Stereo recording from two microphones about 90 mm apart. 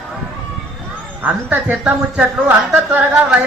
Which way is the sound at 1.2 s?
20° right (ahead or behind).